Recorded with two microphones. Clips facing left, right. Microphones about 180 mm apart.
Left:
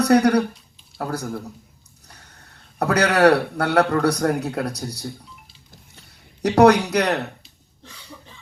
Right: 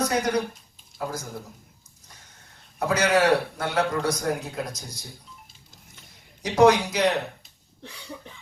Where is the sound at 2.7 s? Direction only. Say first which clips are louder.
Left 3 dB; 65° left (ahead or behind).